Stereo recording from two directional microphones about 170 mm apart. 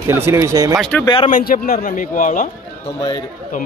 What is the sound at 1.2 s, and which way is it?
A man's voice, 50° left (ahead or behind).